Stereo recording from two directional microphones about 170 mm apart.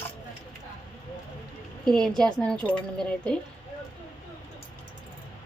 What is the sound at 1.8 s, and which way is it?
Speech, 5° left (ahead or behind).